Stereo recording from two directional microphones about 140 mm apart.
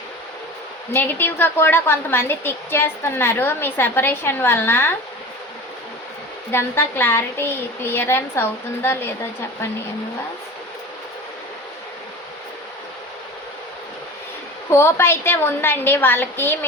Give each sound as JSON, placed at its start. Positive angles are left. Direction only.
{"t": 0.9, "sound": "a woman's voice", "side_deg": 15}
{"t": 6.5, "sound": "a woman's voice", "side_deg": 15}
{"t": 14.7, "sound": "a woman's voice", "side_deg": 20}